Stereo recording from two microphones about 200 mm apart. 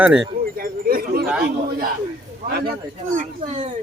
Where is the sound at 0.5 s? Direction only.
45° right (ahead or behind).